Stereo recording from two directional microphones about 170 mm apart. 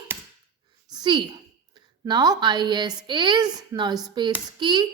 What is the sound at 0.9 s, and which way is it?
A woman's voice, 25° right (ahead or behind).